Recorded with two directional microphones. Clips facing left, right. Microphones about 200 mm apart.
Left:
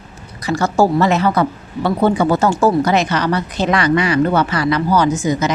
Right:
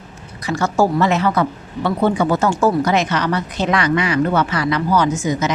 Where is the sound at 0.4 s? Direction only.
35° left (ahead or behind).